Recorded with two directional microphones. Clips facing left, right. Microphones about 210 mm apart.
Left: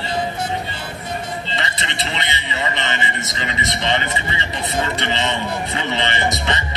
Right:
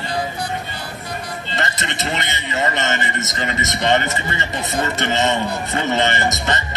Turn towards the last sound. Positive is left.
turn(degrees=-45)  # may be behind; listen again after turning